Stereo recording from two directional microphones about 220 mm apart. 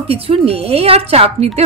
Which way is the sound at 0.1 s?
25° right (ahead or behind).